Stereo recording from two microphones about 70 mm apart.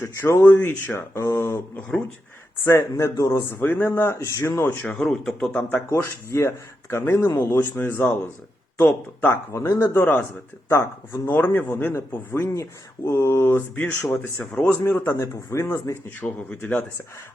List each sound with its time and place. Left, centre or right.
0.0 s a man's voice: left
2.6 s a man's voice: left
5.0 s speech: centre
5.9 s a man's voice: left
11.3 s speech: left
11.9 s a man's voice: left
16.2 s speech: left